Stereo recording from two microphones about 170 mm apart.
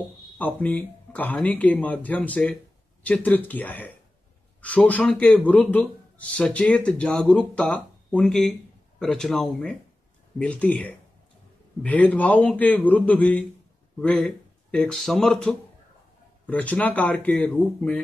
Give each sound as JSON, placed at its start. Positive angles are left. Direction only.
{"t": 0.4, "sound": "a man's voice", "side_deg": 10}